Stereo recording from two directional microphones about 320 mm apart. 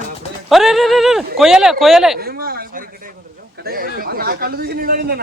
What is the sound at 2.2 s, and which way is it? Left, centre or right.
Speech, right.